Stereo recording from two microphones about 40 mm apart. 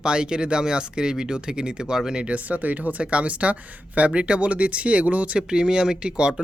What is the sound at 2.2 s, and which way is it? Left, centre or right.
Speech, right.